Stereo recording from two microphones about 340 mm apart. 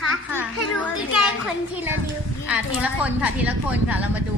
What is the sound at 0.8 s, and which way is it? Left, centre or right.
A woman's voice, centre.